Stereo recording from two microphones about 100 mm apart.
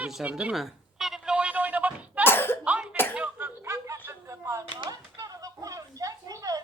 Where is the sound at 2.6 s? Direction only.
10° right (ahead or behind).